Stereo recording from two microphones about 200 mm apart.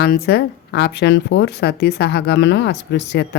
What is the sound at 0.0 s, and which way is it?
Speech, 55° left (ahead or behind).